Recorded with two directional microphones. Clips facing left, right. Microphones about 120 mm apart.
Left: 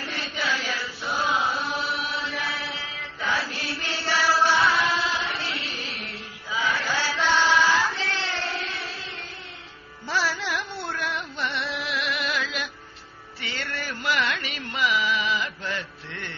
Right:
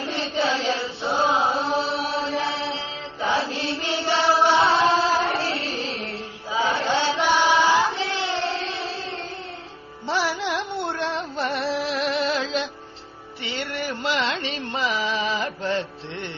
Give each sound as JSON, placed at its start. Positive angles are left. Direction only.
{"t": 0.0, "sound": "chant", "side_deg": -25}
{"t": 10.0, "sound": "music", "side_deg": -20}
{"t": 13.4, "sound": "music", "side_deg": -20}